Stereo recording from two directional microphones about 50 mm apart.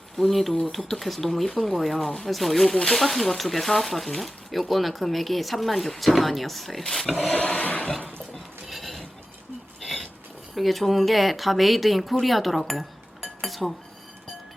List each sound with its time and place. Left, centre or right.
0.2 s speech: centre
7.2 s a sound: left
8.3 s dishes: centre
9.8 s a sound: centre
10.5 s speech: centre
13.4 s dishes: centre